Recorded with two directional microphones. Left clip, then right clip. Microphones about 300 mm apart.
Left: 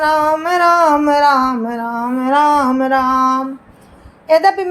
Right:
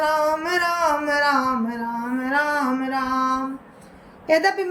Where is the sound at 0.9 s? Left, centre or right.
Centre.